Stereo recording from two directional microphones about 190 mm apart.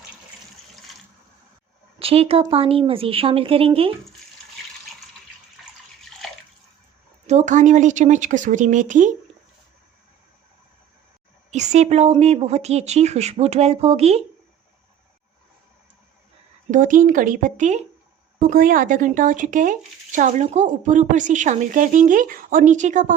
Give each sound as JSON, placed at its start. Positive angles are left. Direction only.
{"t": 2.0, "sound": "speech", "side_deg": -30}
{"t": 7.3, "sound": "speech", "side_deg": -40}
{"t": 11.5, "sound": "speech", "side_deg": -40}
{"t": 16.7, "sound": "speech", "side_deg": -45}